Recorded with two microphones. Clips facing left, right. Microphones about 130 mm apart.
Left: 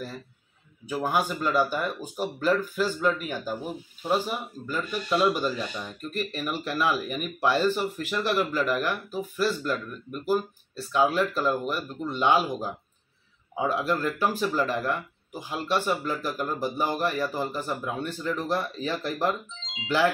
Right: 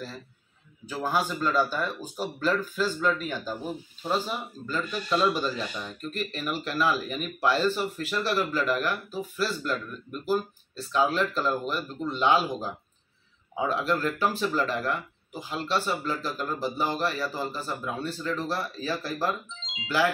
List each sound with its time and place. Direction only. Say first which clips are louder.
0.8 s speech: left 2 dB; 15° left (ahead or behind)